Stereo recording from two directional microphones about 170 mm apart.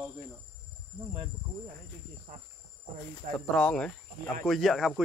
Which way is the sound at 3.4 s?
5° left (ahead or behind).